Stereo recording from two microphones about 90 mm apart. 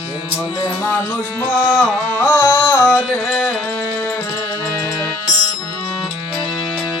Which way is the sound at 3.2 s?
Centre (ahead or behind).